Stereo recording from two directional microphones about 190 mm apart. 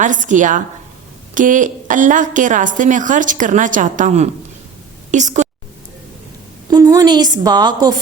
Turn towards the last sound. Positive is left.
turn(degrees=-20)  # may be behind; listen again after turning